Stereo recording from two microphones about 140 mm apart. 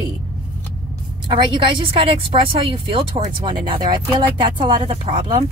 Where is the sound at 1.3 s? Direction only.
35° right (ahead or behind).